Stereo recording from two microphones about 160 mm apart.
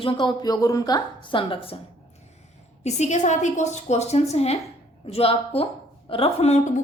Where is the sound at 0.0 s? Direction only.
30° left (ahead or behind).